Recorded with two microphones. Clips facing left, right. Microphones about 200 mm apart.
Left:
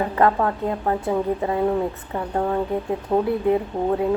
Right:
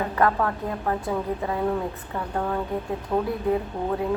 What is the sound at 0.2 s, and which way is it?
A woman's voice, 25° left (ahead or behind).